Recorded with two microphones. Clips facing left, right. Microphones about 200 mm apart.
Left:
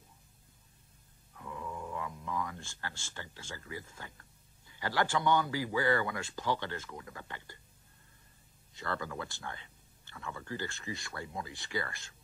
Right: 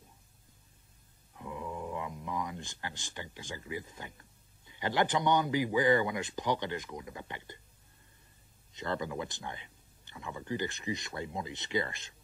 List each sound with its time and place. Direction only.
1.3 s speech: 20° right (ahead or behind)
8.7 s speech: 20° right (ahead or behind)